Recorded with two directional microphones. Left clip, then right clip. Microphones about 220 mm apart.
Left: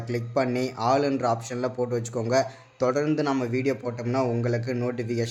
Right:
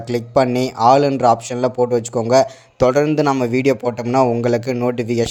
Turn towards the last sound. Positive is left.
turn(degrees=-30)  # may be behind; listen again after turning